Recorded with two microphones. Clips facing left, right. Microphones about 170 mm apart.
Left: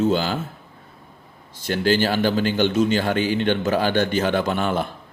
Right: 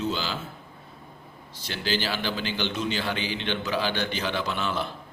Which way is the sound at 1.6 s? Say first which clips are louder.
Left 10 dB; 50° left (ahead or behind).